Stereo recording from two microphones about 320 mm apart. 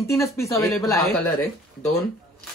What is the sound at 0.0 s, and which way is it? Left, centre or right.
Speech, centre.